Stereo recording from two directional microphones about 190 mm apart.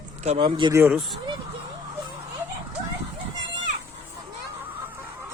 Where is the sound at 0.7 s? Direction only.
10° right (ahead or behind).